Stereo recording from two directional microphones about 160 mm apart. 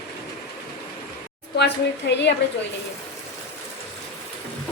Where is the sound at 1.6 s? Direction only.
90° left.